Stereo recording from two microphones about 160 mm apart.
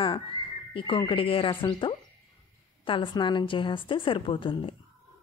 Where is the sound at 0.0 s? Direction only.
30° left (ahead or behind).